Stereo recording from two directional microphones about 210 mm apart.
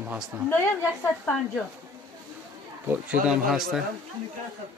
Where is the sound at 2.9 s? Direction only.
5° right (ahead or behind).